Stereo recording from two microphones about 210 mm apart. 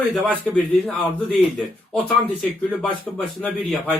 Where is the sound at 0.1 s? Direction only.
5° right (ahead or behind).